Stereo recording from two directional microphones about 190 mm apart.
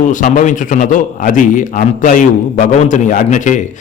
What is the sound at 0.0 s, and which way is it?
A man's voice, 40° left (ahead or behind).